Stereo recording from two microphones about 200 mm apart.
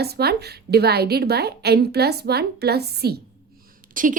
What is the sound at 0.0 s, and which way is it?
A woman's voice, 55° right (ahead or behind).